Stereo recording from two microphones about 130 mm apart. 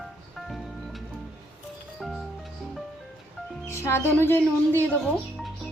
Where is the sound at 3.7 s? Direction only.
20° left (ahead or behind).